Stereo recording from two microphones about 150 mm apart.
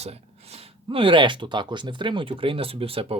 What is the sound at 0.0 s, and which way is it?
Speech, 45° right (ahead or behind).